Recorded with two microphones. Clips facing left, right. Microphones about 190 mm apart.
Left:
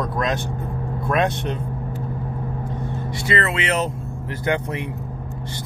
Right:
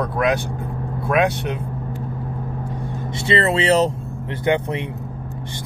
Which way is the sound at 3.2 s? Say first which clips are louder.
Right 5 dB; 30° right (ahead or behind).